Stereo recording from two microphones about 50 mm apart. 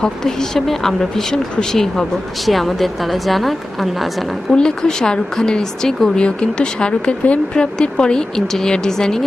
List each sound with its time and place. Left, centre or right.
0.0 s a woman's voice: centre
4.5 s speech: centre